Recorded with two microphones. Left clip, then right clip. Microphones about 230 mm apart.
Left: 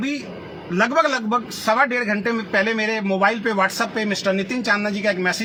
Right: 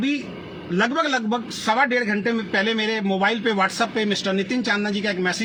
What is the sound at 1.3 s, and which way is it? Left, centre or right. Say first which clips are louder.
A man's voice: left 3 dB; left.